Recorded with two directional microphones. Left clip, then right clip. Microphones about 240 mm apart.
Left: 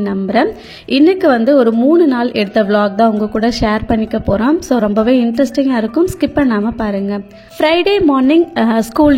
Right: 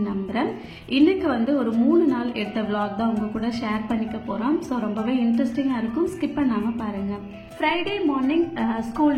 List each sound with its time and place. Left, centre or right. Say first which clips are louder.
0.0 s a woman's voice: left 12 dB; left